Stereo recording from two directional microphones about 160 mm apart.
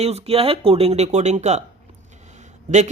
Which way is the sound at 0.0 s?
40° right (ahead or behind).